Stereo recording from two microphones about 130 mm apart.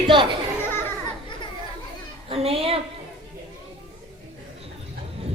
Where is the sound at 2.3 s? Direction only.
50° right (ahead or behind).